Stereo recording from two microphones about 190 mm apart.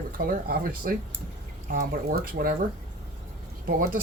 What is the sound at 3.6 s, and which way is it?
Speech, 50° right (ahead or behind).